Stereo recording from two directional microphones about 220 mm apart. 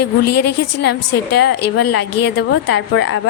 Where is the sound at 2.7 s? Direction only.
50° left (ahead or behind).